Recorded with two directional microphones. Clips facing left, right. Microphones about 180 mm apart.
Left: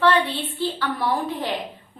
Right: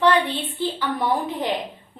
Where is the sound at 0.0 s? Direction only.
20° right (ahead or behind).